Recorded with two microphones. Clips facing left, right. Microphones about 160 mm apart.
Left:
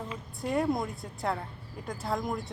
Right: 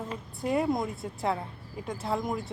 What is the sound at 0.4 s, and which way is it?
Speech, centre (ahead or behind).